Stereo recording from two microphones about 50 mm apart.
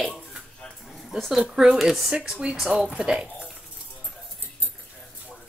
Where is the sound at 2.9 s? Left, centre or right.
Centre.